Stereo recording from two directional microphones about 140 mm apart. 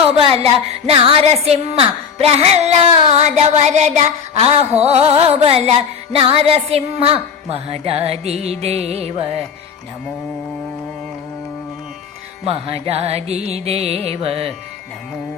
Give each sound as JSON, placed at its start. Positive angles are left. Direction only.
{"t": 0.9, "sound": "music", "side_deg": -45}
{"t": 12.5, "sound": "music", "side_deg": -45}